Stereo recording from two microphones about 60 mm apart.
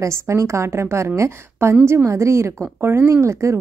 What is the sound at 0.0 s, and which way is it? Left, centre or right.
A woman's voice, right.